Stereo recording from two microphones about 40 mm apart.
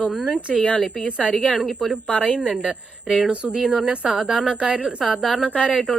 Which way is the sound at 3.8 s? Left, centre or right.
Right.